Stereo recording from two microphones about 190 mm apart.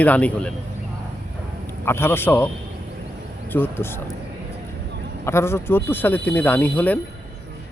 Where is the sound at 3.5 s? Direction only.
10° left (ahead or behind).